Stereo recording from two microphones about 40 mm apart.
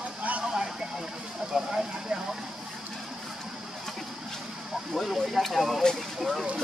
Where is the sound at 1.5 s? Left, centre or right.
Centre.